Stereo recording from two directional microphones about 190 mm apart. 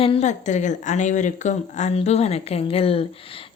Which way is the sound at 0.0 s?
35° left (ahead or behind).